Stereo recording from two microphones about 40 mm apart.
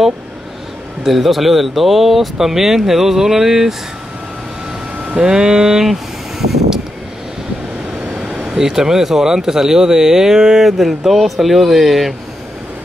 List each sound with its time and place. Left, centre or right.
1.0 s speech: centre
5.1 s speech: centre
8.3 s speech: centre